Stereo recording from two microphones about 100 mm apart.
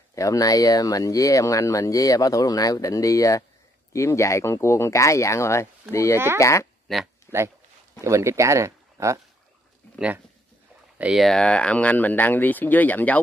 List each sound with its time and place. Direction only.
0.1 s speech: 35° left (ahead or behind)
6.1 s speech: 25° right (ahead or behind)
6.4 s speech: 30° left (ahead or behind)
7.2 s speech: 25° right (ahead or behind)
11.0 s speech: 5° right (ahead or behind); by 13.2 s 15° left (ahead or behind)